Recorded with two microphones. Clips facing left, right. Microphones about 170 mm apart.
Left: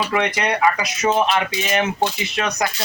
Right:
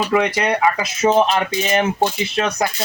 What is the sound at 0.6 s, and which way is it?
Speech, 25° right (ahead or behind).